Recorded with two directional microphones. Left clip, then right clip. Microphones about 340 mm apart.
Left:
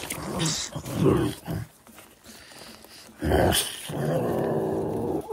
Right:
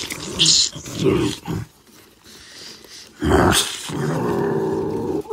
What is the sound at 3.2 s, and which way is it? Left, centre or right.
Dog, centre.